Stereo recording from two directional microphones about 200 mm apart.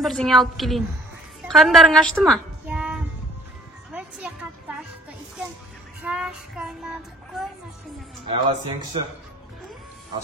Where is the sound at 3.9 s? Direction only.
5° right (ahead or behind).